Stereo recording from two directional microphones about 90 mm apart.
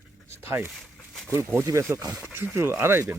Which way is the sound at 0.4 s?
25° right (ahead or behind).